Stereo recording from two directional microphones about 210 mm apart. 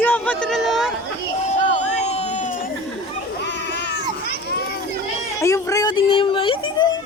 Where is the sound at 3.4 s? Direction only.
55° left (ahead or behind).